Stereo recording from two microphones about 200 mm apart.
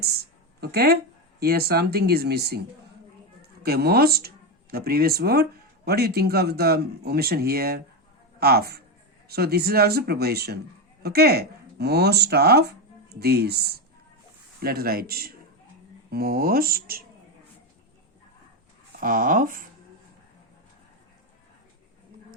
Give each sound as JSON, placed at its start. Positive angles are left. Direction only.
{"t": 0.0, "sound": "a sound", "side_deg": -50}
{"t": 1.4, "sound": "speech", "side_deg": -50}
{"t": 3.6, "sound": "speech", "side_deg": -50}
{"t": 18.9, "sound": "speech", "side_deg": -45}